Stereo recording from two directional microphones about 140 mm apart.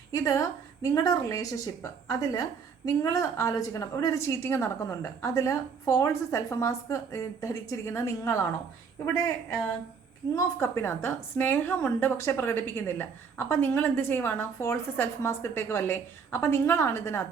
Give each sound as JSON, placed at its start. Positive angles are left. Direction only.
{"t": 0.1, "sound": "a woman's voice", "side_deg": 25}
{"t": 10.3, "sound": "a woman's voice", "side_deg": 20}